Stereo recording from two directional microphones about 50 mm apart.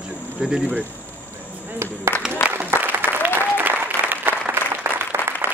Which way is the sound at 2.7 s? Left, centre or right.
Right.